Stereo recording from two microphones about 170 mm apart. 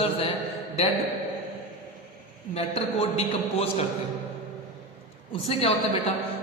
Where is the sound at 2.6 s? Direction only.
35° left (ahead or behind).